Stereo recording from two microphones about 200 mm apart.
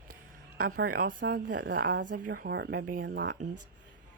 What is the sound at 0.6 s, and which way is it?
Speech, 45° right (ahead or behind).